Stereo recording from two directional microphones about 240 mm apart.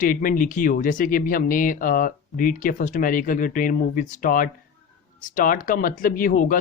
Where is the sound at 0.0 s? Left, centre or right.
Left.